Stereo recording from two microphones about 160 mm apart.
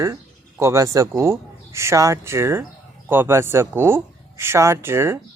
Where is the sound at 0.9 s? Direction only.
15° right (ahead or behind).